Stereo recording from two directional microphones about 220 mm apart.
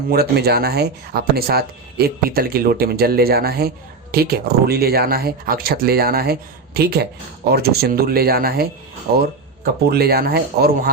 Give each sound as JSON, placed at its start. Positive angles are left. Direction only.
{"t": 0.1, "sound": "speech", "side_deg": -45}